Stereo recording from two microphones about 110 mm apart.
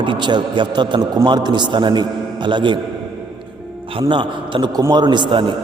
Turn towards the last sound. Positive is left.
turn(degrees=-45)  # may be behind; listen again after turning